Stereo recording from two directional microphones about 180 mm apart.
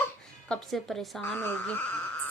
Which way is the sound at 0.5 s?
Centre (ahead or behind).